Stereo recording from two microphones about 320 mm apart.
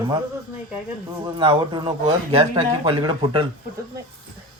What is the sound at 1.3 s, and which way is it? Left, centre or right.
Speech, centre.